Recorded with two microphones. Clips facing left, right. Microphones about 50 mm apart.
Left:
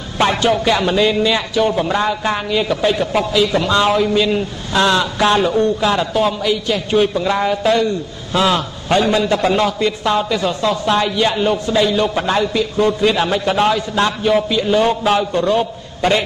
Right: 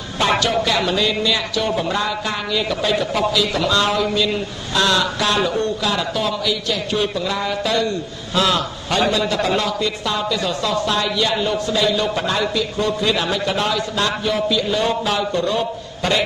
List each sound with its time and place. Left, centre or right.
0.8 s a man's voice: left